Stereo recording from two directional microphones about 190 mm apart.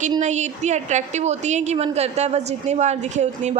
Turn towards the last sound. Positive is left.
turn(degrees=-40)  # may be behind; listen again after turning